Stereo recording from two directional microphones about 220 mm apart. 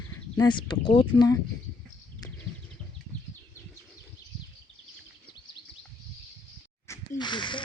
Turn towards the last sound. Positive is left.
turn(degrees=20)  # may be behind; listen again after turning